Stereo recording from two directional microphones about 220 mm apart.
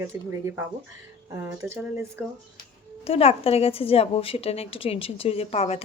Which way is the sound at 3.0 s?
25° left (ahead or behind).